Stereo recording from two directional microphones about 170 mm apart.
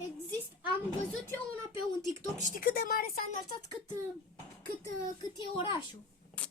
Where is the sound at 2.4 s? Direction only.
50° left (ahead or behind).